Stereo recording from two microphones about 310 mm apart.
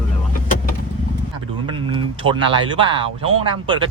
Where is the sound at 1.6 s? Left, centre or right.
Centre.